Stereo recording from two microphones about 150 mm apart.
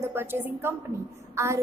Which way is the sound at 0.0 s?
15° right (ahead or behind).